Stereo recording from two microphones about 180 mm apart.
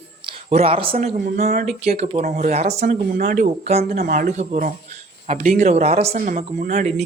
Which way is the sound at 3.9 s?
55° right (ahead or behind).